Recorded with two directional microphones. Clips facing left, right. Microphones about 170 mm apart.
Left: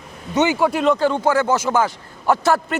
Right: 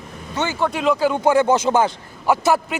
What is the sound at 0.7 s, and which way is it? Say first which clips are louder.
A man's voice: left 1 dB; centre (ahead or behind).